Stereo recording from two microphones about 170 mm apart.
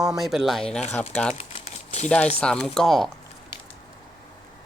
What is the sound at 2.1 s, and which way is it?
Speech, 10° left (ahead or behind).